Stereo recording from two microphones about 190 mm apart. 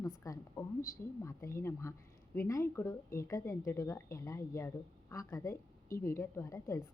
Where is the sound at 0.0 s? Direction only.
15° left (ahead or behind).